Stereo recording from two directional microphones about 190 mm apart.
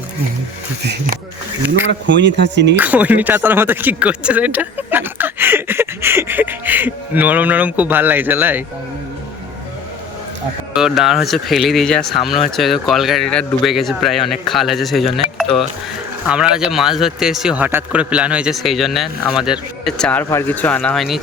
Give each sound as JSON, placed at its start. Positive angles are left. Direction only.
{"t": 0.8, "sound": "speech", "side_deg": -60}
{"t": 2.7, "sound": "speech", "side_deg": -10}
{"t": 10.8, "sound": "a man's voice", "side_deg": 0}